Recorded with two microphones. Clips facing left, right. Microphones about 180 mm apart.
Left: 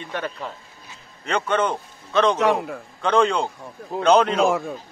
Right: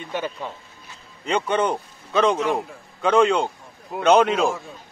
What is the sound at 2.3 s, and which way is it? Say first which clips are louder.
Speech: left 3 dB; 70° left (ahead or behind).